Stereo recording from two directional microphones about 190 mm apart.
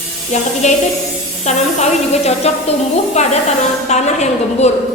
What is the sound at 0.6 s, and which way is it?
A woman's voice, 35° left (ahead or behind).